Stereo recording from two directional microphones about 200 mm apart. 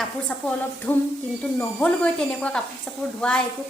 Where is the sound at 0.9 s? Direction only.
10° left (ahead or behind).